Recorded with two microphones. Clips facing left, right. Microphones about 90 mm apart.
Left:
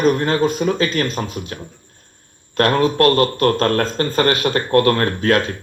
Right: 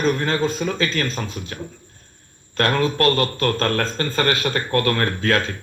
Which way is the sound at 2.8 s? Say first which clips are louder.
Left 4 dB; 15° left (ahead or behind).